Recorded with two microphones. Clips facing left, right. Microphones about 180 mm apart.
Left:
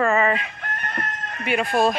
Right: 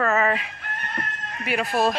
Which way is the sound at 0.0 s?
Centre (ahead or behind).